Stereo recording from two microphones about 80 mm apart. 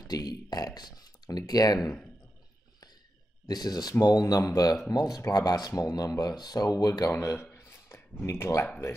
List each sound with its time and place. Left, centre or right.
0.1 s speech: left
3.4 s speech: left
7.5 s a sound: left
8.3 s speech: left